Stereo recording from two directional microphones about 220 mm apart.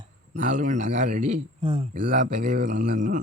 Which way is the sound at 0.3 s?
35° right (ahead or behind).